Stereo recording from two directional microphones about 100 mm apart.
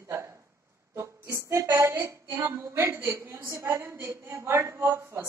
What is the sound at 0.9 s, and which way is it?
A woman's voice, 30° right (ahead or behind).